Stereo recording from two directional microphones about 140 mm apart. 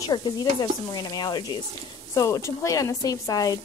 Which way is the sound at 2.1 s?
25° left (ahead or behind).